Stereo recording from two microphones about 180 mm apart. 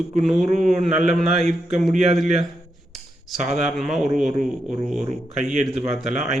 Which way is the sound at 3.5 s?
Centre (ahead or behind).